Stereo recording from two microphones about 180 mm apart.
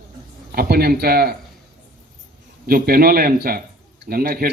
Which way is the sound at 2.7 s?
55° right (ahead or behind).